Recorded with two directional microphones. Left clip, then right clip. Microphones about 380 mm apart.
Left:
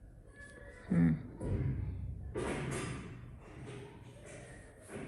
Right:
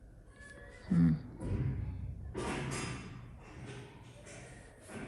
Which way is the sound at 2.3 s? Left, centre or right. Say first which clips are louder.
Even; centre.